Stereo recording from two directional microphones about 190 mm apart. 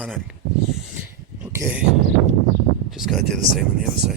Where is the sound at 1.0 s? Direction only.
10° right (ahead or behind).